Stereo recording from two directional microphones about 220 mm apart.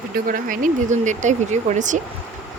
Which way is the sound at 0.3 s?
40° right (ahead or behind).